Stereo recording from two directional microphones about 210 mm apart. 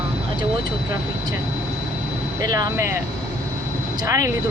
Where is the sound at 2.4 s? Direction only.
15° right (ahead or behind).